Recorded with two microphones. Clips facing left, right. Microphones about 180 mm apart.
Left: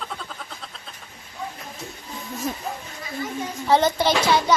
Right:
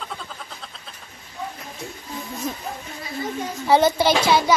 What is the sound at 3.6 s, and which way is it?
Speech, 10° right (ahead or behind).